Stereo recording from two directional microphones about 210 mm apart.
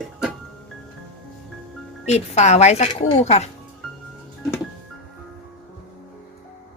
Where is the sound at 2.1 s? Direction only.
30° left (ahead or behind).